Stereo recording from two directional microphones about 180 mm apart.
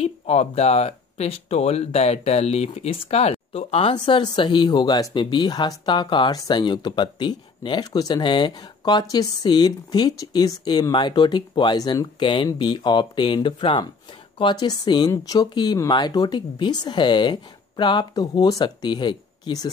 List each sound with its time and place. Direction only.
0.0 s speech: 35° left (ahead or behind)